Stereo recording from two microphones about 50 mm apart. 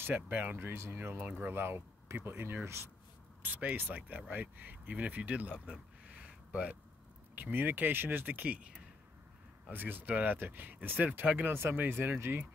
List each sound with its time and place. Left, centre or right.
0.3 s speech: right
0.6 s speech: right
3.4 s speech: right
6.0 s a sound: right
7.3 s speech: right
9.7 s speech: right
11.9 s speech: right